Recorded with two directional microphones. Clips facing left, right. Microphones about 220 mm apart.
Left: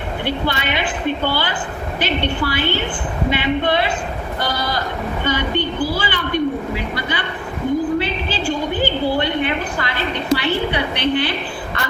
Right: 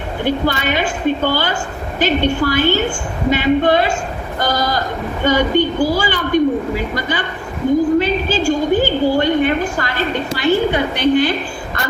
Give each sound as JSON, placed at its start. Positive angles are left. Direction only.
{"t": 0.3, "sound": "a woman's voice", "side_deg": -45}